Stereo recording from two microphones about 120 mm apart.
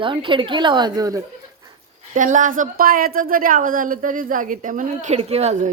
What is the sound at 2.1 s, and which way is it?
A woman's voice, 90° right.